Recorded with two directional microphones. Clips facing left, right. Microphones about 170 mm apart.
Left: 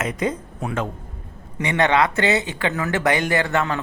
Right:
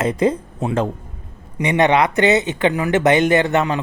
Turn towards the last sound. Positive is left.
turn(degrees=-20)  # may be behind; listen again after turning